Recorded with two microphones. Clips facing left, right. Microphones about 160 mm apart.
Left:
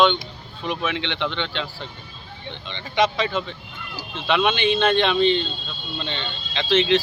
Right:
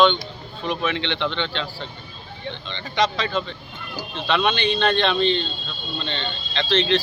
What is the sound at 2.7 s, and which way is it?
Speech, 10° left (ahead or behind).